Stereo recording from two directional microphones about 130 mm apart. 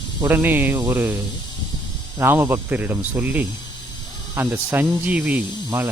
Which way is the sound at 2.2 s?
15° right (ahead or behind).